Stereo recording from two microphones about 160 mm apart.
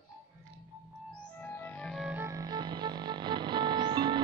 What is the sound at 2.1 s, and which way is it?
Music, 15° right (ahead or behind).